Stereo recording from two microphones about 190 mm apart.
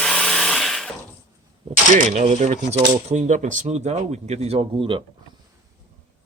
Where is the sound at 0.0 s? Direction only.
5° left (ahead or behind).